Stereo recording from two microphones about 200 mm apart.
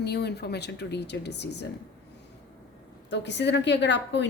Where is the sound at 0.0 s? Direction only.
55° left (ahead or behind).